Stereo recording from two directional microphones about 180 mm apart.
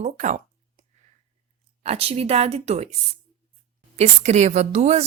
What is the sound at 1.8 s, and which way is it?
A woman's voice, 35° right (ahead or behind).